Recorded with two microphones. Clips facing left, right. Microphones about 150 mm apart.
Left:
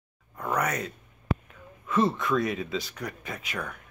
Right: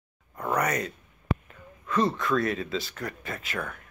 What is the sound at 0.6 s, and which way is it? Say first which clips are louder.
Speech: right 2 dB; 5° left (ahead or behind).